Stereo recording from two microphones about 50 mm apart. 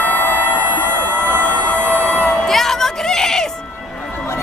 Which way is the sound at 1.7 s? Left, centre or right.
Left.